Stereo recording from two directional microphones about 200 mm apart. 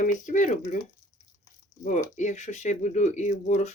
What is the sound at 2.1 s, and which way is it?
Speech, 35° left (ahead or behind).